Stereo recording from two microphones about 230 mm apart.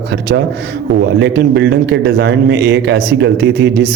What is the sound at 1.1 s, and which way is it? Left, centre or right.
A man's voice, right.